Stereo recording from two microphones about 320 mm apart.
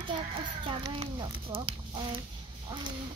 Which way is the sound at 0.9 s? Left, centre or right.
Centre.